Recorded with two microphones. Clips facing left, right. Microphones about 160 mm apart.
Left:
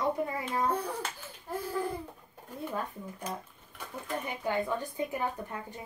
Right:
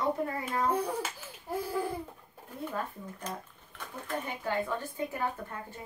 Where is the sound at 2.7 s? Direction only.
10° left (ahead or behind).